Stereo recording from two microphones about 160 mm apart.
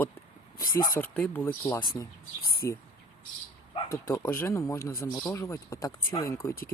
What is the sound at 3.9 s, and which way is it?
Speech, 15° left (ahead or behind).